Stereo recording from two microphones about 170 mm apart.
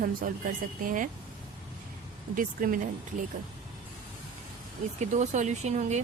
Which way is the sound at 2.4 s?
55° right (ahead or behind).